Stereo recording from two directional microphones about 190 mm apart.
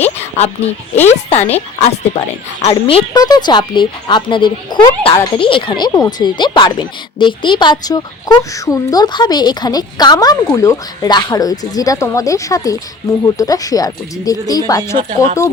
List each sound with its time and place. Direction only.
0.0 s speech: 35° left (ahead or behind); by 14.9 s 20° left (ahead or behind)